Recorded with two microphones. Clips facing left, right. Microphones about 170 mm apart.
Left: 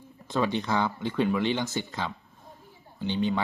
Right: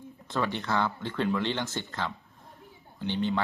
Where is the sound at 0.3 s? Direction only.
15° left (ahead or behind).